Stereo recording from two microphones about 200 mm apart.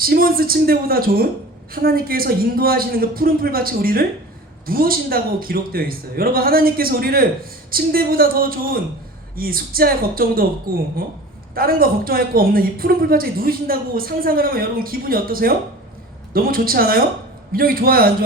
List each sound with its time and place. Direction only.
0.0 s a woman's voice: 45° right (ahead or behind)